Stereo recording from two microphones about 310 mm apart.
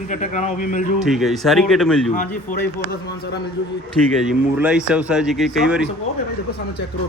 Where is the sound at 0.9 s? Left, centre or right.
Centre.